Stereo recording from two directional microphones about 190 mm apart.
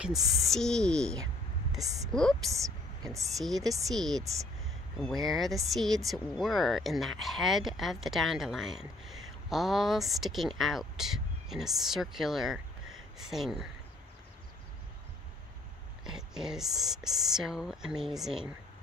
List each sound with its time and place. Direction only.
0.0 s speech: centre (ahead or behind)
2.5 s speech: 15° right (ahead or behind)
3.3 s speech: centre (ahead or behind)
3.6 s speech: 15° right (ahead or behind)
3.9 s speech: centre (ahead or behind)
16.0 s speech: 5° right (ahead or behind)